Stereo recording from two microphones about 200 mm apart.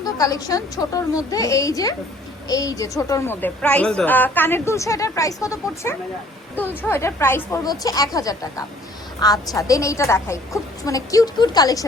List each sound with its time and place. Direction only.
0.0 s a woman's voice: 20° left (ahead or behind)